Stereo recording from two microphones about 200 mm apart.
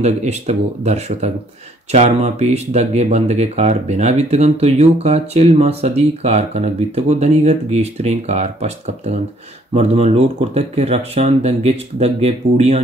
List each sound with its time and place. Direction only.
0.0 s speech: 35° right (ahead or behind)